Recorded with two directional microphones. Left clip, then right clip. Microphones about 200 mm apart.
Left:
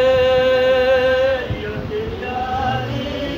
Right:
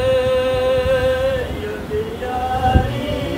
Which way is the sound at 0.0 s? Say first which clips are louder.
Left 2 dB; 25° left (ahead or behind).